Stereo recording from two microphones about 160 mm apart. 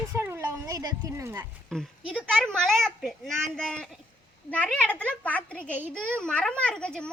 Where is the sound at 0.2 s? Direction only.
15° right (ahead or behind).